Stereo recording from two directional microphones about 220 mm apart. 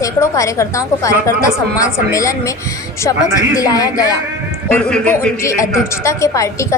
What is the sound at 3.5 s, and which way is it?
A man's voice, 15° left (ahead or behind).